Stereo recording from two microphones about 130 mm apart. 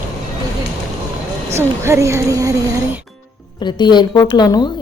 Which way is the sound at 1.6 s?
20° right (ahead or behind).